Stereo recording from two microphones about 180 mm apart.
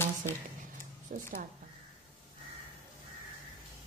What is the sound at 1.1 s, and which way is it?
Speech, 45° right (ahead or behind).